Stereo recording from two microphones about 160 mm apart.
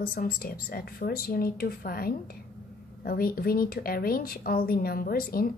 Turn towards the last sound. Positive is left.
turn(degrees=65)  # may be behind; listen again after turning